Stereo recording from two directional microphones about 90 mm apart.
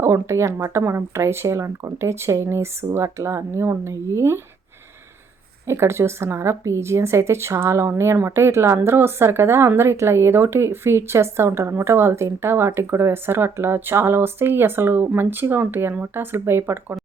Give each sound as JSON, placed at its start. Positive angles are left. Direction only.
{"t": 0.0, "sound": "speech", "side_deg": -30}
{"t": 5.6, "sound": "a woman's voice", "side_deg": -30}